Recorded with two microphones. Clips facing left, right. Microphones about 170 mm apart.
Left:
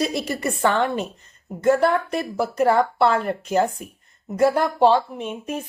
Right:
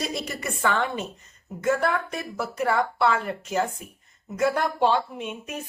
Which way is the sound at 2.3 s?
40° left (ahead or behind).